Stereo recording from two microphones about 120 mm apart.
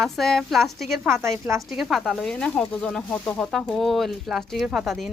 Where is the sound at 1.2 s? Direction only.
25° right (ahead or behind).